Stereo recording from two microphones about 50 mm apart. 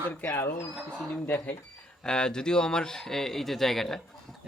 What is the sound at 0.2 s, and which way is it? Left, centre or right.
Speech, left.